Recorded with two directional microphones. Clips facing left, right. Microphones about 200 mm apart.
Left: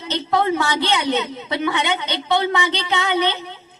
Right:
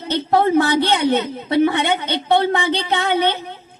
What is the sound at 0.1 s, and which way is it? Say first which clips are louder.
A woman's voice: right 4 dB; 55° right (ahead or behind).